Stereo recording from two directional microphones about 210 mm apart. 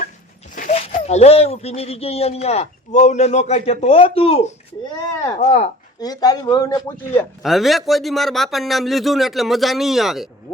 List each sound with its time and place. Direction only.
0.5 s speech: 35° left (ahead or behind)
6.0 s speech: 20° left (ahead or behind)
7.4 s a man's voice: centre (ahead or behind)